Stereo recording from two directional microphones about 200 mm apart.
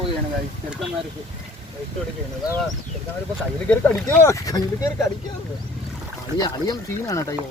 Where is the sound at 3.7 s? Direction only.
5° left (ahead or behind).